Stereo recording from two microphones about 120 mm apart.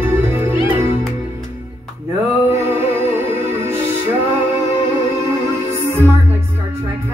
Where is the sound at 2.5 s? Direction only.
20° right (ahead or behind).